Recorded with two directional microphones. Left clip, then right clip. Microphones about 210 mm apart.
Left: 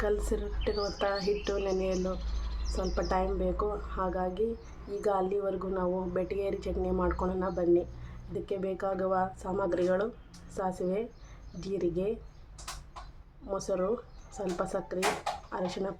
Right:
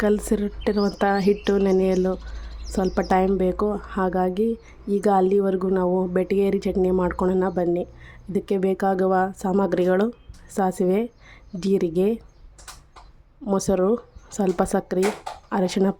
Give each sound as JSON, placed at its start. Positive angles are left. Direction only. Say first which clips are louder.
{"t": 0.0, "sound": "a woman's voice", "louder": "right 9 dB", "side_deg": -45}
{"t": 13.5, "sound": "a woman's voice", "louder": "right 10 dB", "side_deg": -50}